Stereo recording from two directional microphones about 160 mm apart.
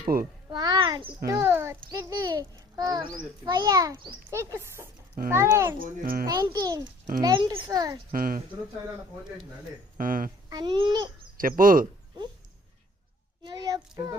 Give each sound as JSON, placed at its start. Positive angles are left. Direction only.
{"t": 0.1, "sound": "a child's voice", "side_deg": -70}
{"t": 0.5, "sound": "a child's voice", "side_deg": -25}
{"t": 1.3, "sound": "a child's voice", "side_deg": -15}
{"t": 5.8, "sound": "speech", "side_deg": -65}
{"t": 6.2, "sound": "a child's voice", "side_deg": -25}
{"t": 8.1, "sound": "speech", "side_deg": -60}
{"t": 10.0, "sound": "speech", "side_deg": -60}
{"t": 10.5, "sound": "a child's voice", "side_deg": -30}
{"t": 11.3, "sound": "speech", "side_deg": -60}
{"t": 13.4, "sound": "a child's voice", "side_deg": -25}